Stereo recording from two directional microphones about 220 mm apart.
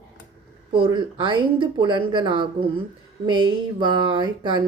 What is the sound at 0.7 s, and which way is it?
Speech, 20° right (ahead or behind).